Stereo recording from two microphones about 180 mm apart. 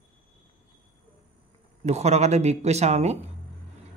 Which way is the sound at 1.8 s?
35° right (ahead or behind).